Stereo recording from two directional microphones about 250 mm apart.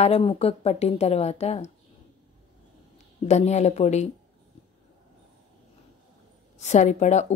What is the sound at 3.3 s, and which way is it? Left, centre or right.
Speech, left.